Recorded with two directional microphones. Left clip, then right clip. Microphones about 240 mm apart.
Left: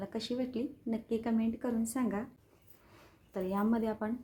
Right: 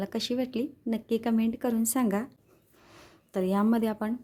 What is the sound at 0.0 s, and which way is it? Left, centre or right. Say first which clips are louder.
Speech: right 6 dB; right.